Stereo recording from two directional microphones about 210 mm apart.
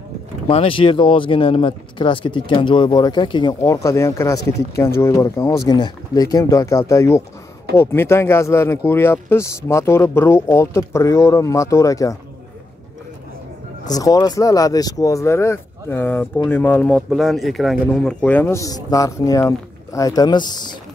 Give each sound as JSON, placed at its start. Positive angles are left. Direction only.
{"t": 0.5, "sound": "a man's voice", "side_deg": 25}
{"t": 13.8, "sound": "a man's voice", "side_deg": 15}